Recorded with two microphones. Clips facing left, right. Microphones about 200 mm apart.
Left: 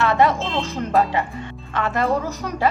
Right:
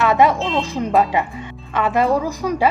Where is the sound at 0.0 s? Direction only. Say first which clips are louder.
Right 3 dB; 15° right (ahead or behind).